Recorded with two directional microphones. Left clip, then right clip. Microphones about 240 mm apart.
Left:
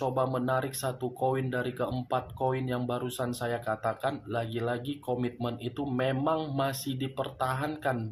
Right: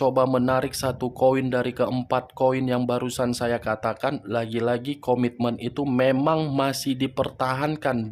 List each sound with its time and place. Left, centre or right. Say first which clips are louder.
0.0 s speech: right 9 dB; right